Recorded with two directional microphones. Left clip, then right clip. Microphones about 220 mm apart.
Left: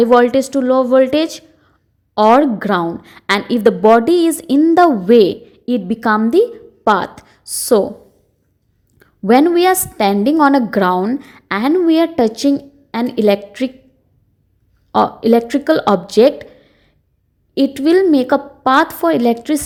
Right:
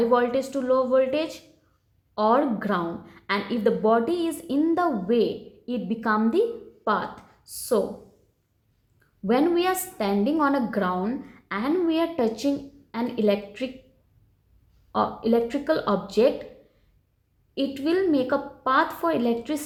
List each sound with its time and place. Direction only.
0.0 s a woman's voice: 40° left (ahead or behind)
9.0 s a woman's voice: 40° left (ahead or behind)
14.9 s a woman's voice: 40° left (ahead or behind)
17.5 s a woman's voice: 40° left (ahead or behind)